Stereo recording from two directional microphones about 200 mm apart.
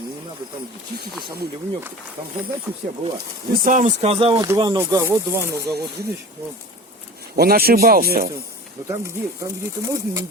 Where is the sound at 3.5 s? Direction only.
45° right (ahead or behind); by 5.1 s 15° right (ahead or behind).